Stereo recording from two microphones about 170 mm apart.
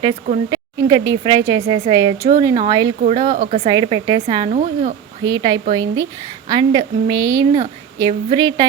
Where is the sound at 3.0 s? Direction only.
45° right (ahead or behind).